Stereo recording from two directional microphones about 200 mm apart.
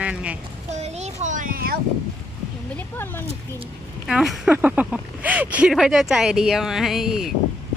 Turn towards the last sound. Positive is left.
turn(degrees=0)  # may be behind; listen again after turning